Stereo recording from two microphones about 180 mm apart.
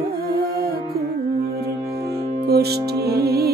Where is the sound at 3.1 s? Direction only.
60° right (ahead or behind).